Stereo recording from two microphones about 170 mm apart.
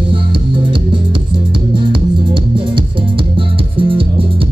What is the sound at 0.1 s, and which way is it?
Music, 30° right (ahead or behind).